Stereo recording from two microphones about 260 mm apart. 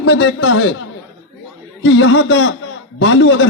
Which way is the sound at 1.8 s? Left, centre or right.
Left.